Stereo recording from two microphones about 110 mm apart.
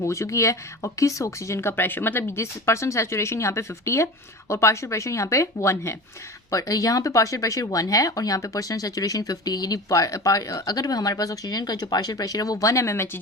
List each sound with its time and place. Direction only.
0.0 s speech: 25° left (ahead or behind)